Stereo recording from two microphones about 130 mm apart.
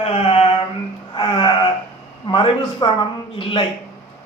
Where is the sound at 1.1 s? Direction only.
40° left (ahead or behind).